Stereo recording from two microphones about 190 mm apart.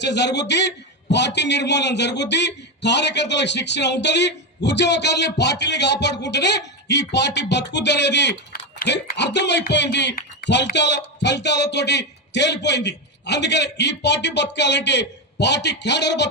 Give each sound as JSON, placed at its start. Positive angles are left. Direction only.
{"t": 0.0, "sound": "a man's voice", "side_deg": 65}